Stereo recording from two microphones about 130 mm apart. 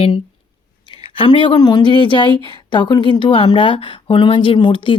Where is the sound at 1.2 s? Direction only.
40° left (ahead or behind).